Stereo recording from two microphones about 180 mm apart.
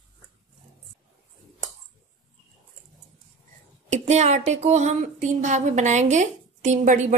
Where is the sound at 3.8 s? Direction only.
40° right (ahead or behind).